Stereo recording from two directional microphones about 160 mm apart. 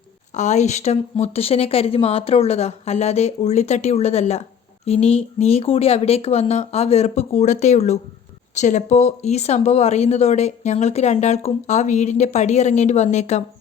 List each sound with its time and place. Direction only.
0.3 s speech: 45° left (ahead or behind)